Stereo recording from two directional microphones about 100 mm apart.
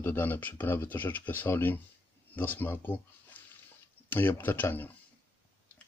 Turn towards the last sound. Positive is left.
turn(degrees=20)  # may be behind; listen again after turning